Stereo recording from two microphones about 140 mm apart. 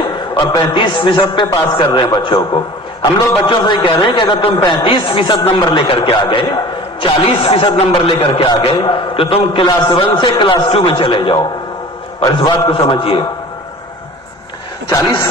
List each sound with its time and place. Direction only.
0.3 s a man's voice: 35° left (ahead or behind)
8.7 s a man's voice: 35° left (ahead or behind)
14.9 s speech: 20° left (ahead or behind)